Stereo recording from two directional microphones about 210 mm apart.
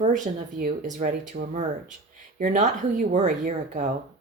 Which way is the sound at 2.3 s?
35° right (ahead or behind).